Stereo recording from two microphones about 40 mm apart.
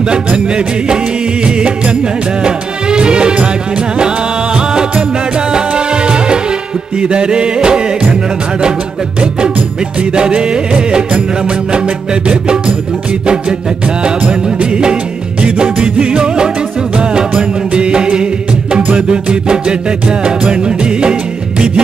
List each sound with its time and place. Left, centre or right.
0.3 s music: right
4.6 s music: right
10.1 s music: right
14.6 s music: right
18.8 s music: right